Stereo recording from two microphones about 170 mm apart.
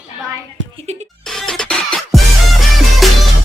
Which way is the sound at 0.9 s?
40° right (ahead or behind).